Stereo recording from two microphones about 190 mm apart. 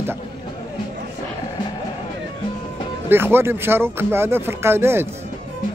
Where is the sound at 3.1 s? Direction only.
10° right (ahead or behind).